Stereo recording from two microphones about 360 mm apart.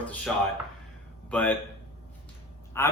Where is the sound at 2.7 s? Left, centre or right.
Centre.